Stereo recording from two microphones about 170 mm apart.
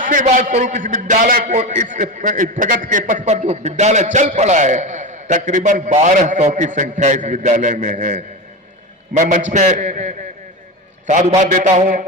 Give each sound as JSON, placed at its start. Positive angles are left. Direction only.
{"t": 0.0, "sound": "a man's voice", "side_deg": -50}